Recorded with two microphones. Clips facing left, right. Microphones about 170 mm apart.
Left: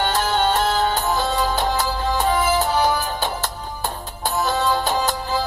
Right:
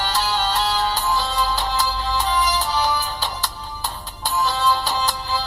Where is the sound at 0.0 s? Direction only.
50° left (ahead or behind).